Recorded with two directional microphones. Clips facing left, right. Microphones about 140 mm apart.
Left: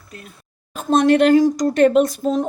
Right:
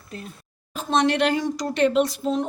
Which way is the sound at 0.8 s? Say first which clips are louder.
Left 6 dB; 50° left (ahead or behind).